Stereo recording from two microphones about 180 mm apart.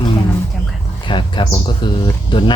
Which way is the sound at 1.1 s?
25° left (ahead or behind).